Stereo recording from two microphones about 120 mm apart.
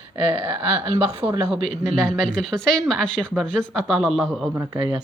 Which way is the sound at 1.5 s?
Centre (ahead or behind).